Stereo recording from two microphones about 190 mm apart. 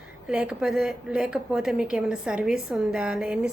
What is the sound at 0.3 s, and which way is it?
A woman's voice, 5° right (ahead or behind).